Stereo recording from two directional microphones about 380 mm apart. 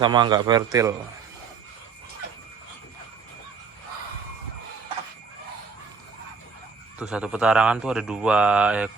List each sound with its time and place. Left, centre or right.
0.0 s a man's voice: centre
7.0 s speech: centre